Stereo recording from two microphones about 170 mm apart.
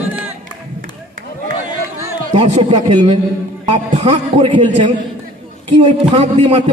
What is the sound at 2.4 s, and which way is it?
A man's voice, 30° right (ahead or behind).